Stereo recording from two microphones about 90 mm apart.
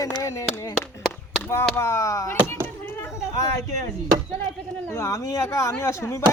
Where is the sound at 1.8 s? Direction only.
35° left (ahead or behind).